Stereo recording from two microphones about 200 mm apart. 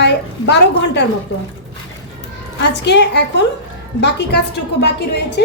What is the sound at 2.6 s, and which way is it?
Speech, 60° left (ahead or behind).